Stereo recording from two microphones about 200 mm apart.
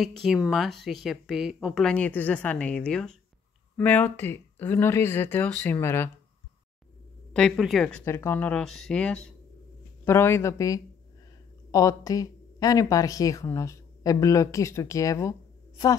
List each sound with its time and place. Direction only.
0.0 s speech: centre (ahead or behind)
7.3 s speech: centre (ahead or behind)